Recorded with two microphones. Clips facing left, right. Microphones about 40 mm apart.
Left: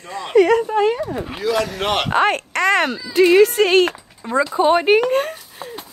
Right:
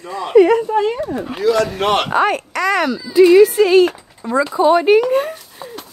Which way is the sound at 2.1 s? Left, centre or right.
Left.